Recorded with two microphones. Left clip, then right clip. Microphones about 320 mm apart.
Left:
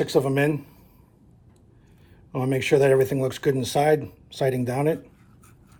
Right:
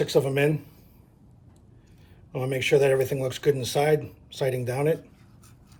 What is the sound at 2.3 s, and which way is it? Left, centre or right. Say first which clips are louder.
Speech: left 1 dB; left.